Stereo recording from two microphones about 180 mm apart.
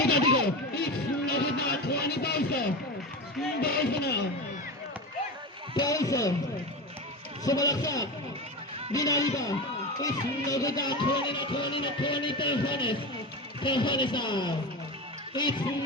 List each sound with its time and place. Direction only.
0.0 s a sound: 65° left (ahead or behind)
1.3 s music: 60° left (ahead or behind)
3.6 s speech: 60° left (ahead or behind)
5.7 s music: 20° left (ahead or behind)
7.4 s music: 20° left (ahead or behind)